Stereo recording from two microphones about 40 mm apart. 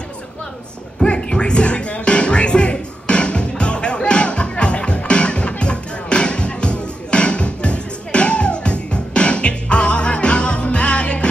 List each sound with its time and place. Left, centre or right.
0.9 s music: left